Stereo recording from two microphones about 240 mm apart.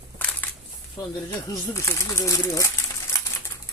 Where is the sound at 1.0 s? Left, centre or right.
Centre.